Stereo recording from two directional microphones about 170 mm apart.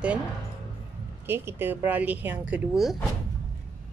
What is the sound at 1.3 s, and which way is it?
Speech, 15° right (ahead or behind).